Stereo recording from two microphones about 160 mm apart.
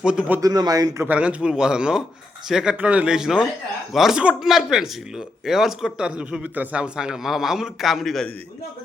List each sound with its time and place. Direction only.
0.0 s speech: 5° right (ahead or behind)
0.4 s speech: 20° right (ahead or behind)
1.0 s speech: 10° right (ahead or behind)